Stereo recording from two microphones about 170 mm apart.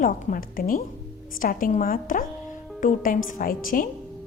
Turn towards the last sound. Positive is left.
turn(degrees=55)  # may be behind; listen again after turning